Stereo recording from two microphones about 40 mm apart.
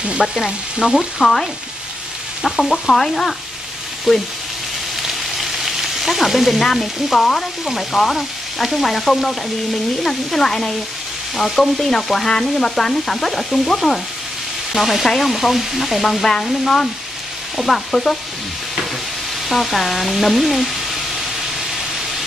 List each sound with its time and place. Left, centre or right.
0.5 s frying: centre
1.2 s frying: centre
4.1 s frying: centre
7.6 s frying: centre
19.5 s frying: centre